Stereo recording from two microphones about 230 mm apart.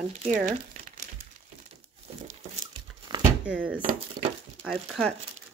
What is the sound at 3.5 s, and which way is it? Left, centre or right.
Speech, centre.